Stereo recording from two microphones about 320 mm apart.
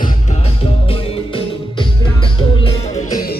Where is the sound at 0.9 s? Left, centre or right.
Centre.